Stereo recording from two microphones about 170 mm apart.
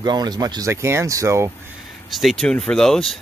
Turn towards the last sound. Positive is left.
turn(degrees=5)  # may be behind; listen again after turning